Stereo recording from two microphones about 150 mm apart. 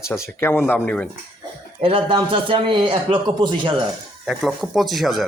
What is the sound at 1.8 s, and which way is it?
A man's voice, 35° right (ahead or behind).